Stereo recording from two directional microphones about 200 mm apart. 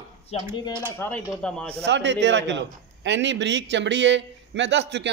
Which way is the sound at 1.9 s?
60° right (ahead or behind).